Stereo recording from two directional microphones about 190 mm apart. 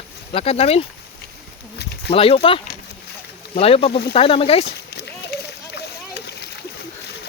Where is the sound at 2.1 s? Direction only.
30° left (ahead or behind).